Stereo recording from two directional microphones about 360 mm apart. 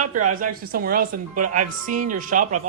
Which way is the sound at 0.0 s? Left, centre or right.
Right.